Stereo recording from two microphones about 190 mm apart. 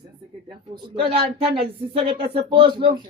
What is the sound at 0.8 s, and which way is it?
A woman's voice, 30° right (ahead or behind).